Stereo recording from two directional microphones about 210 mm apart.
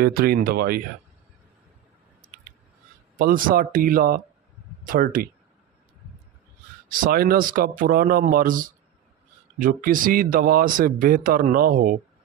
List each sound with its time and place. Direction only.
0.0 s speech: 45° right (ahead or behind)
3.2 s speech: 45° right (ahead or behind)
6.9 s speech: 45° right (ahead or behind)